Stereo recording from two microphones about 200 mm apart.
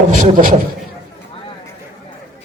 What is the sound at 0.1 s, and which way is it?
Speech, 40° right (ahead or behind).